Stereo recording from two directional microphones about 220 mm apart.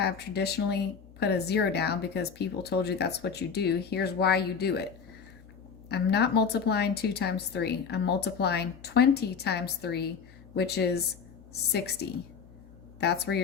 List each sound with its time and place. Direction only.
0.0 s a woman's voice: 45° left (ahead or behind)
5.9 s a woman's voice: 50° left (ahead or behind)